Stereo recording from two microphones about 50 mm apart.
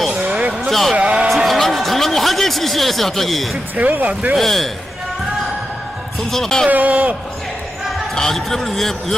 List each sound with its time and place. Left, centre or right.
0.1 s a sound: right
0.7 s a man's voice: centre
0.9 s a sound: right
1.3 s a sound: centre
3.8 s speech: right
4.4 s a man's voice: centre
6.1 s a man's voice: centre
6.7 s speech: right
8.1 s a man's voice: centre